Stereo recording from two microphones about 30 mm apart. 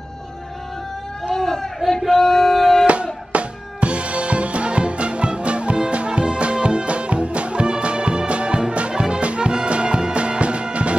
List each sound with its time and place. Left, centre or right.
1.3 s a sound: centre
2.9 s drum kit: right
9.2 s music: right